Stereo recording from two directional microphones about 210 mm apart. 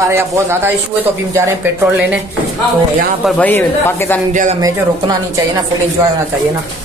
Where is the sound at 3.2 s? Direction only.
5° left (ahead or behind).